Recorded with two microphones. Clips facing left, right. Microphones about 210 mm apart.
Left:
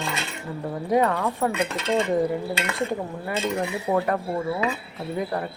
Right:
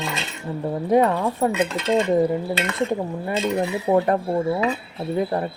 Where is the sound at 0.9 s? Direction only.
25° right (ahead or behind).